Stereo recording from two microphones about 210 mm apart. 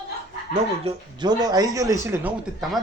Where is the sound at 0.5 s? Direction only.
25° right (ahead or behind).